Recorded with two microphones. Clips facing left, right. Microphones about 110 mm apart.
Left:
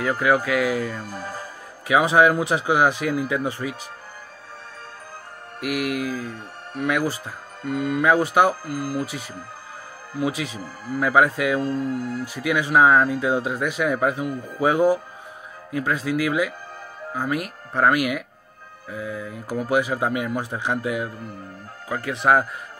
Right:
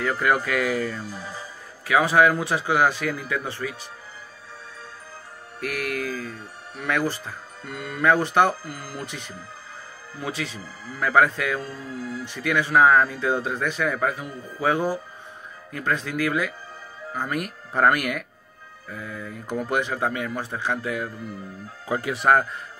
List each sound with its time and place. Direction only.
0.0 s speech: 5° left (ahead or behind)
1.0 s speech: 50° left (ahead or behind)
1.9 s speech: 20° left (ahead or behind)
5.6 s speech: 15° left (ahead or behind)
11.6 s speech: 55° left (ahead or behind)
12.3 s speech: 10° left (ahead or behind)
21.8 s speech: 15° right (ahead or behind)
22.1 s speech: 5° left (ahead or behind)